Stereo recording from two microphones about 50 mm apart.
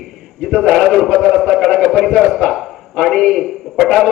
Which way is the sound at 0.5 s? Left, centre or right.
Centre.